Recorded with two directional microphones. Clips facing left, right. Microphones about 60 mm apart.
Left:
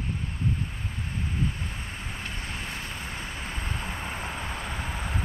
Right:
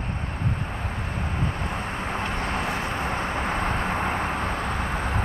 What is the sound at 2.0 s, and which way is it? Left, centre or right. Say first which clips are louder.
Vehicle: right 9 dB; right.